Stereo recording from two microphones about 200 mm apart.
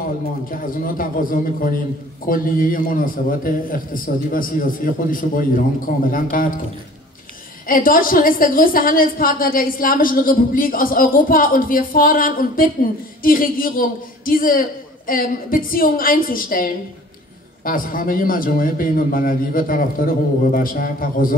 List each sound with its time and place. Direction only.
0.5 s a woman's voice: 45° left (ahead or behind)
7.6 s a woman's voice: 45° left (ahead or behind)